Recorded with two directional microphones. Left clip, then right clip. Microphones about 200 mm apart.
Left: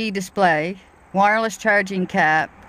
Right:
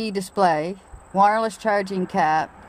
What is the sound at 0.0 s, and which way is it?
Speech, 25° left (ahead or behind).